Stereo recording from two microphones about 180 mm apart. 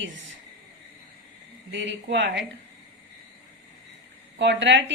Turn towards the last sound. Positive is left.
turn(degrees=-90)